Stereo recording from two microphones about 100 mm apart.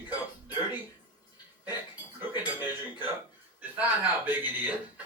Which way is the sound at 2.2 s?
20° right (ahead or behind).